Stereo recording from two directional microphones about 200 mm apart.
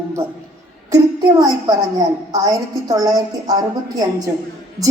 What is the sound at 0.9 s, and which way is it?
A woman's voice, 20° right (ahead or behind).